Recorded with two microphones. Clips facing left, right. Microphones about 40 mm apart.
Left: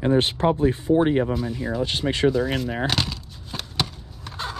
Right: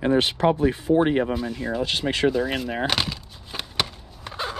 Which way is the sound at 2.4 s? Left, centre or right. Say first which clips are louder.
Left 1 dB; centre.